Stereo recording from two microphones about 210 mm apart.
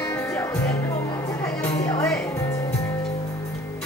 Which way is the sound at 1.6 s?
15° left (ahead or behind).